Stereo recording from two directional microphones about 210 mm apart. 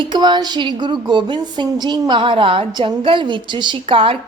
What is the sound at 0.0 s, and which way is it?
Speech, 20° right (ahead or behind).